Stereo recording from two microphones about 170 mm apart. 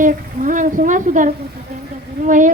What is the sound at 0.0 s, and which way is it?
Speech, 50° right (ahead or behind).